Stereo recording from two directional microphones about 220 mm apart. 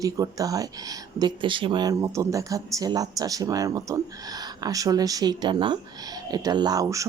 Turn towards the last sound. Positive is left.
turn(degrees=-15)  # may be behind; listen again after turning